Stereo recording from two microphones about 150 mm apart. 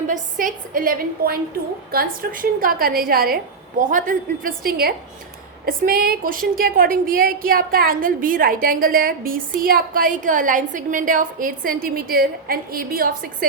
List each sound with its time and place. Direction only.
0.1 s a woman's voice: 65° right (ahead or behind); by 4.9 s 85° right
5.6 s a woman's voice: 70° right (ahead or behind)